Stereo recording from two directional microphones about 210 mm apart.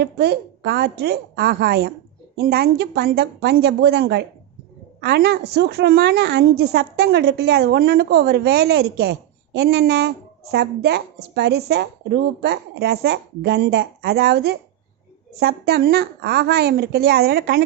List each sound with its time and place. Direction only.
0.0 s a woman's voice: 50° right (ahead or behind)